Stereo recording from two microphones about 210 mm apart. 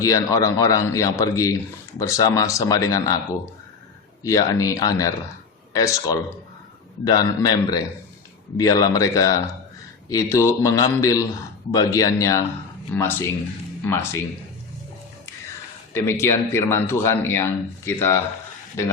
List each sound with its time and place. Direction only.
0.0 s a man's voice: 15° left (ahead or behind)
4.2 s a man's voice: 15° left (ahead or behind)
16.0 s a man's voice: 10° left (ahead or behind)